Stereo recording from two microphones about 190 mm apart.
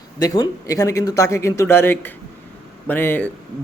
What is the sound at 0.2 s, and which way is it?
A man's voice, 20° left (ahead or behind).